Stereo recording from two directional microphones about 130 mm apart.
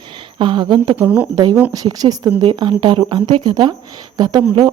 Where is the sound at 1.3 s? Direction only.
30° right (ahead or behind).